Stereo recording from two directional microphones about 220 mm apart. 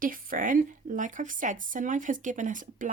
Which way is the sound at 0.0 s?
40° right (ahead or behind).